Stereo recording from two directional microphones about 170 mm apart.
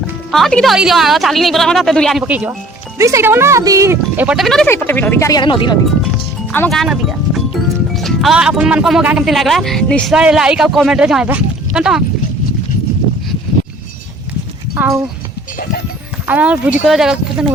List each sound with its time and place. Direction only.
0.3 s speech: centre (ahead or behind)
2.2 s speech: 10° right (ahead or behind)
4.3 s speech: centre (ahead or behind)
4.7 s speech: 15° left (ahead or behind)
6.7 s speech: centre (ahead or behind)
14.8 s speech: 15° right (ahead or behind)
16.2 s speech: 10° right (ahead or behind)